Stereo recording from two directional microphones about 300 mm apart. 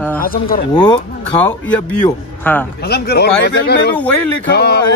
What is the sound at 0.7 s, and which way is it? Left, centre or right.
A man's voice, centre.